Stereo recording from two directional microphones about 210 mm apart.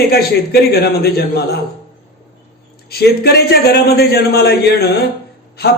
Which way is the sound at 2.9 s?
50° left (ahead or behind).